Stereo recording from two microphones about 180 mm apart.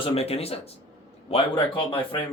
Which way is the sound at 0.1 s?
35° left (ahead or behind).